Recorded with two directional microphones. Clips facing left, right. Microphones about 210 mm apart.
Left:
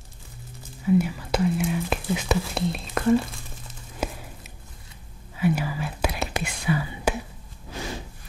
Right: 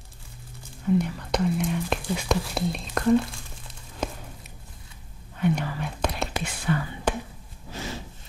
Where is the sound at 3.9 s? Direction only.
5° left (ahead or behind).